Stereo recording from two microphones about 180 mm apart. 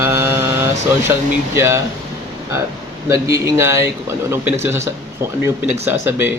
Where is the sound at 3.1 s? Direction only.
15° right (ahead or behind).